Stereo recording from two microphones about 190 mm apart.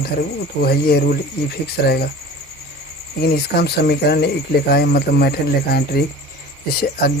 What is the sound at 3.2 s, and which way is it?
Speech, 55° left (ahead or behind).